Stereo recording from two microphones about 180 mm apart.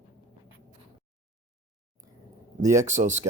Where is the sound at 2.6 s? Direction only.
15° right (ahead or behind).